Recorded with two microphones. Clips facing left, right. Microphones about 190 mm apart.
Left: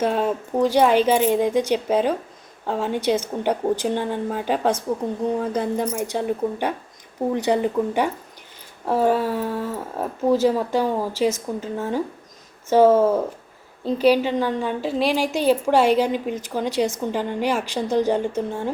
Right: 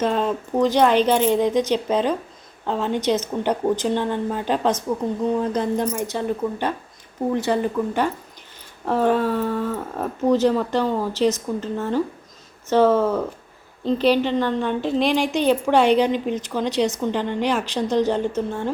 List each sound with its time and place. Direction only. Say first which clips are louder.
0.0 s speech: even; 10° left (ahead or behind)